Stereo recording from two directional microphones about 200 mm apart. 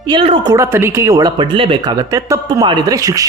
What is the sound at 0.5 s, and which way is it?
A man's voice, 15° right (ahead or behind).